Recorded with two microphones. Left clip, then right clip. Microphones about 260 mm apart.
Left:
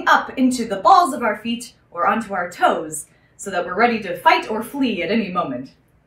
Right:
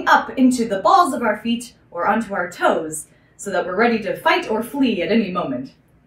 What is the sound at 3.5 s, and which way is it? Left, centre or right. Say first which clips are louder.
A woman's voice: even; centre.